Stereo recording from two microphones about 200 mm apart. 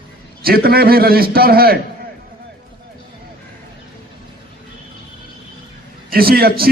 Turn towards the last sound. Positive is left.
turn(degrees=-50)  # may be behind; listen again after turning